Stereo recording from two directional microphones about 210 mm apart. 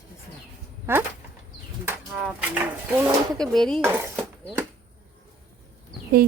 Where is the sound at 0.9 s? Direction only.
10° right (ahead or behind).